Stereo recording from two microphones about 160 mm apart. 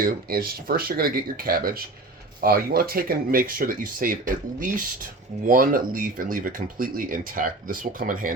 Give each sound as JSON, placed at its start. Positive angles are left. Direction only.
{"t": 0.0, "sound": "speech", "side_deg": -65}